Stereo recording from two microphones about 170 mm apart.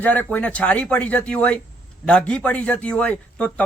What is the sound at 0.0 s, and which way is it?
A man's voice, 10° left (ahead or behind).